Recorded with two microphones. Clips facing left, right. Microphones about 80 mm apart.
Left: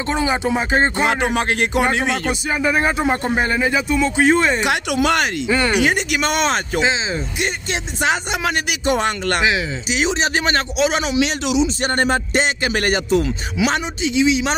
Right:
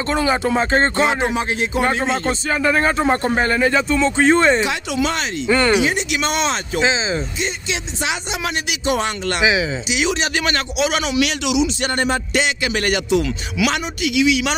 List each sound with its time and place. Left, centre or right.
0.0 s speech: centre
1.0 s speech: left
2.5 s speech: centre
4.6 s speech: left
5.5 s speech: centre
5.8 s speech: left
6.8 s speech: centre
8.0 s speech: left
9.4 s speech: centre
9.8 s a man's voice: left